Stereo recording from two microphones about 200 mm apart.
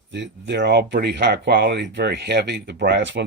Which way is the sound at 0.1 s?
60° right (ahead or behind).